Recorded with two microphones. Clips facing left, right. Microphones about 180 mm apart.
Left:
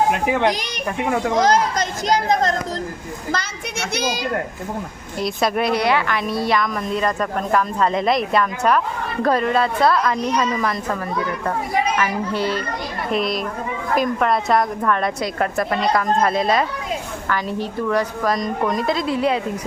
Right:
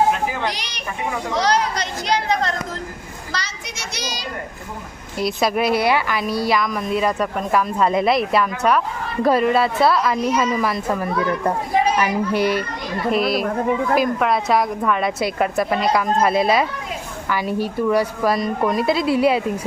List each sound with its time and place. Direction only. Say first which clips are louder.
0.1 s a sound: left 2 dB; 70° left (ahead or behind)
0.4 s a child's voice: left 6 dB; 45° left (ahead or behind)
3.3 s a woman's voice: left 1 dB; 55° left (ahead or behind)
5.2 s a woman's voice: right 1 dB; 5° right (ahead or behind)